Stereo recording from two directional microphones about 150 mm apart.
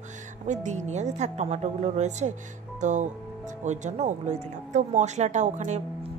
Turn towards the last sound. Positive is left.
turn(degrees=-50)  # may be behind; listen again after turning